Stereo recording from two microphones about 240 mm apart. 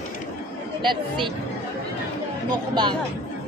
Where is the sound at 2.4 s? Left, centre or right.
Centre.